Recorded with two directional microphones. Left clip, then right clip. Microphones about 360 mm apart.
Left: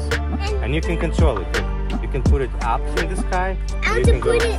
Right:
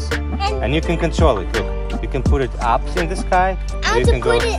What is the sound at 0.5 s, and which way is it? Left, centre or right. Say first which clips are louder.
Speech: right 2 dB; right.